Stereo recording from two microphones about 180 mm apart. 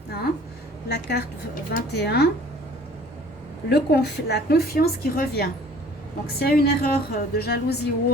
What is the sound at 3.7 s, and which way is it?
A woman's voice, 65° left (ahead or behind).